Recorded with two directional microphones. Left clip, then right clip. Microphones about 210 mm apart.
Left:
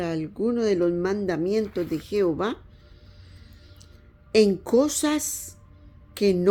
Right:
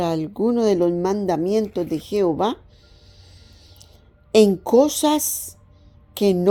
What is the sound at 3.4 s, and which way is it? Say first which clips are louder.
Music: right 4 dB; 20° right (ahead or behind).